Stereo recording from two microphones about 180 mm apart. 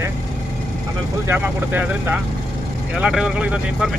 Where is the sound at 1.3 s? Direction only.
10° right (ahead or behind).